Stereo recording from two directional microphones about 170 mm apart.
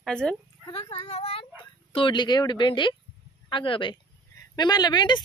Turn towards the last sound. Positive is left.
turn(degrees=25)  # may be behind; listen again after turning